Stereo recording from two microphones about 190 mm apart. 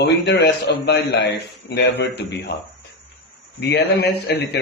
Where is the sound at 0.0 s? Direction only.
65° left (ahead or behind).